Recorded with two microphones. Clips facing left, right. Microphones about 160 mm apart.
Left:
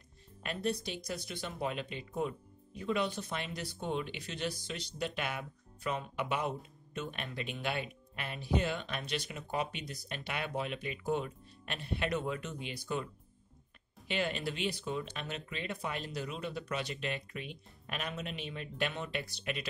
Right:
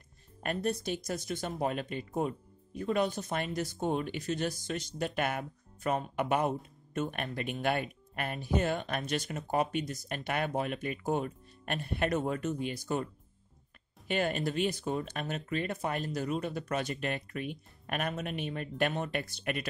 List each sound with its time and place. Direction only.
0.4 s speech: 50° right (ahead or behind)